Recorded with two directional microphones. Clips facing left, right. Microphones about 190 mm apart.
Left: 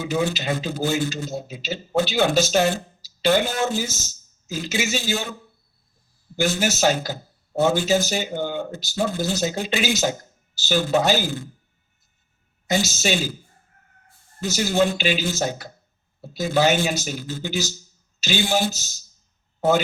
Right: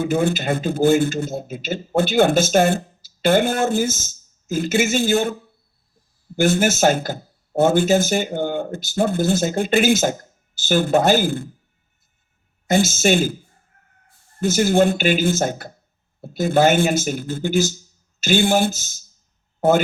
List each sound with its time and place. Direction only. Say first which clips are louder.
0.0 s speech: right 4 dB; 55° right (ahead or behind)
6.3 s speech: right 5 dB; 50° right (ahead or behind)
12.6 s speech: right 6 dB; 50° right (ahead or behind)
14.4 s speech: right 5 dB; 50° right (ahead or behind)